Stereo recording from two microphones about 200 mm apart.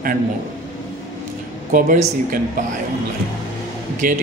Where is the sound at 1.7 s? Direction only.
45° right (ahead or behind).